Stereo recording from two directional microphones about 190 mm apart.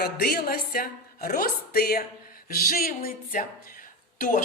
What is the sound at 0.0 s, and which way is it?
A woman's voice, 50° left (ahead or behind).